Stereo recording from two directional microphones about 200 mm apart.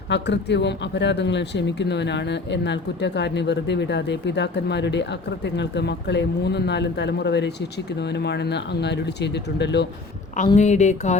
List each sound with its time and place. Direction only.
0.1 s speech: 60° left (ahead or behind)
10.6 s speech: 35° left (ahead or behind)